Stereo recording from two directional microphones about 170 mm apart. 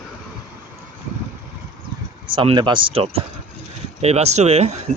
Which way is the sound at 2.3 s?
30° right (ahead or behind).